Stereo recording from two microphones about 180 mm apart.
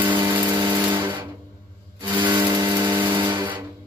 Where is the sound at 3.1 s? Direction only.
25° right (ahead or behind).